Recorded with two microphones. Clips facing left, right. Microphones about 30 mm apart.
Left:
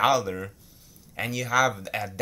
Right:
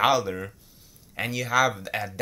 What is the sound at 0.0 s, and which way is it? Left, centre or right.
Speech, centre.